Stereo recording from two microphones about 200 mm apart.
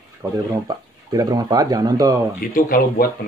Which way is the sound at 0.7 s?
20° right (ahead or behind).